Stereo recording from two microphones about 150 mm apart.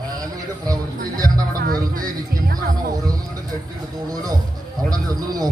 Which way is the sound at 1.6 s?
70° right (ahead or behind).